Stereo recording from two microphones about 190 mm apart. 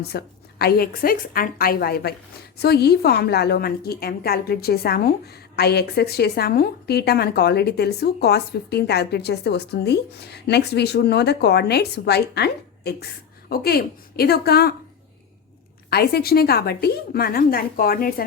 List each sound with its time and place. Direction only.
0.1 s a woman's voice: 55° left (ahead or behind)
15.9 s a woman's voice: 55° left (ahead or behind)